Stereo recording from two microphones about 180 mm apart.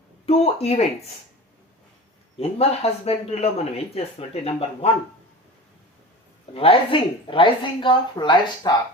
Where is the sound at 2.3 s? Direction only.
35° left (ahead or behind).